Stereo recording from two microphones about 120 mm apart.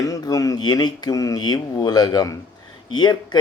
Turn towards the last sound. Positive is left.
turn(degrees=35)  # may be behind; listen again after turning